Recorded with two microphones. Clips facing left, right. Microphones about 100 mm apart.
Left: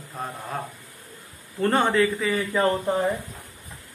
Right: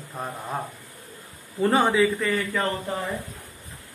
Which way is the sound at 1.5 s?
5° right (ahead or behind).